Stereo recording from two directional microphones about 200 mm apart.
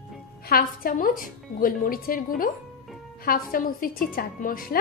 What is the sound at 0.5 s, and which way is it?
A woman's voice, 45° left (ahead or behind).